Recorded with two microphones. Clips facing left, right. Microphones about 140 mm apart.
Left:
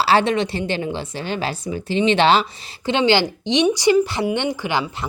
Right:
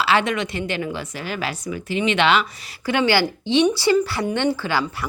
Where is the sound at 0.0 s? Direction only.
35° left (ahead or behind).